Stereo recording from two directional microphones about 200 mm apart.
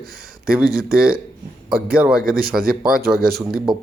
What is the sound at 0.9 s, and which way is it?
Speech, 5° right (ahead or behind).